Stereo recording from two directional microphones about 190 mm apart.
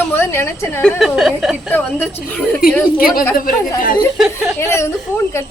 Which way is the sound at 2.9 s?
50° left (ahead or behind).